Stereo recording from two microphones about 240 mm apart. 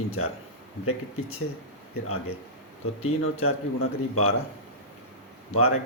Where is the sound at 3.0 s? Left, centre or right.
Left.